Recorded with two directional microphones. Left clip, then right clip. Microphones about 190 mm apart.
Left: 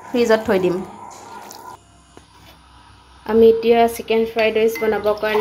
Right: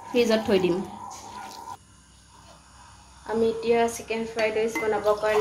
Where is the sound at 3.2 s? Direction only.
45° left (ahead or behind).